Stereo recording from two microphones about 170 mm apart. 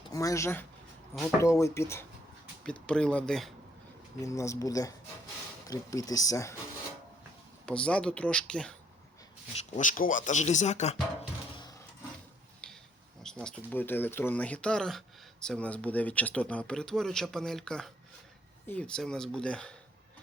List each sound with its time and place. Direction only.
0.1 s speech: 20° left (ahead or behind)
2.6 s speech: 5° left (ahead or behind)
4.2 s speech: 20° left (ahead or behind)
7.6 s speech: 5° left (ahead or behind)
9.6 s speech: 50° left (ahead or behind)
12.6 s a sound: 5° left (ahead or behind)
13.2 s speech: 5° left (ahead or behind)